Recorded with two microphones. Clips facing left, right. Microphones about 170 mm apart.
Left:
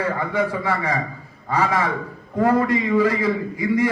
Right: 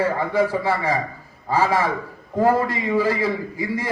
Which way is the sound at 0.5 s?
30° right (ahead or behind).